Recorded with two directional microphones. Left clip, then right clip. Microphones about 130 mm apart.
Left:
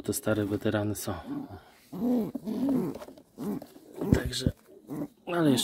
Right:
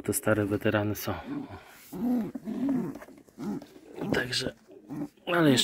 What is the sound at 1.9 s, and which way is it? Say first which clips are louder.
Mantra: left 1 dB; 40° left (ahead or behind).